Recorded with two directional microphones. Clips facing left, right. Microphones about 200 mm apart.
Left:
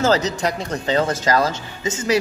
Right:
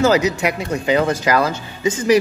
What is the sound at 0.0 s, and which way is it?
Speech, 10° right (ahead or behind).